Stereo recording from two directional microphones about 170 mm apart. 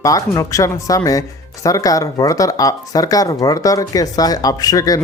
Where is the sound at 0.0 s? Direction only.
20° left (ahead or behind).